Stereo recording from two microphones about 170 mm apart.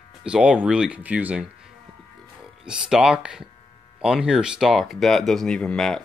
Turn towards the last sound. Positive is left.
turn(degrees=0)  # may be behind; listen again after turning